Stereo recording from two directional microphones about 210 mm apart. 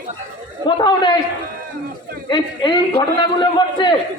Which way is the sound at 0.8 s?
20° left (ahead or behind).